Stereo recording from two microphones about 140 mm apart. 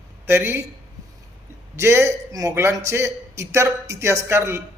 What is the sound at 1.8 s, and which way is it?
A man's voice, 20° right (ahead or behind).